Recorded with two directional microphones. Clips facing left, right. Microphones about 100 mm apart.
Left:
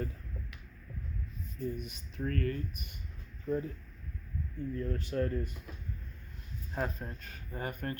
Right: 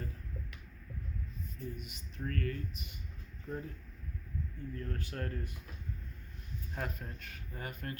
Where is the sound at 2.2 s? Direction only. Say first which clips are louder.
Left 4 dB; 40° left (ahead or behind).